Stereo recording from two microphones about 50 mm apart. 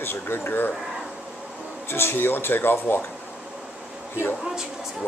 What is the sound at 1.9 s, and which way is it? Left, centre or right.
Speech, left.